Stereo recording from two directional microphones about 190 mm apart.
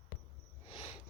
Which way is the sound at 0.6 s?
30° left (ahead or behind).